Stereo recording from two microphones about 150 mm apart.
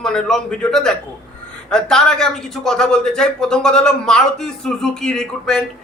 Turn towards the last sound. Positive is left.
turn(degrees=5)  # may be behind; listen again after turning